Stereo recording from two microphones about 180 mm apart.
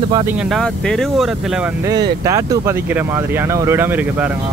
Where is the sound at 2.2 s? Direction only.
15° right (ahead or behind).